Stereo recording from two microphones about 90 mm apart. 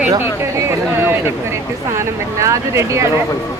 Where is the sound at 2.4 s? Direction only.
35° right (ahead or behind).